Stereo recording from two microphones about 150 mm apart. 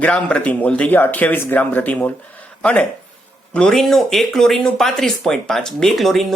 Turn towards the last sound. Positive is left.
turn(degrees=0)  # may be behind; listen again after turning